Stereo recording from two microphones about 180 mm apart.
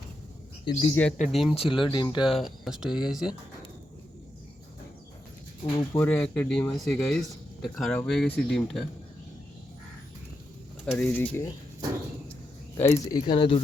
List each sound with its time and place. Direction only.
0.9 s speech: 5° left (ahead or behind)
1.5 s speech: 30° left (ahead or behind)
2.3 s speech: centre (ahead or behind)
5.6 s speech: 15° left (ahead or behind); by 8.8 s centre (ahead or behind)
10.8 s speech: 5° left (ahead or behind)
12.8 s speech: 15° left (ahead or behind)
13.2 s speech: 30° left (ahead or behind)